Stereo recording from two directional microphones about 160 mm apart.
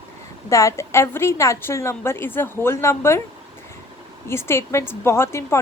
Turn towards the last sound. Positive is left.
turn(degrees=15)  # may be behind; listen again after turning